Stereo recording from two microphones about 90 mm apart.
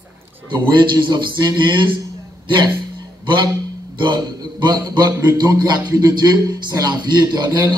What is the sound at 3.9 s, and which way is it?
A man's voice, 55° right (ahead or behind).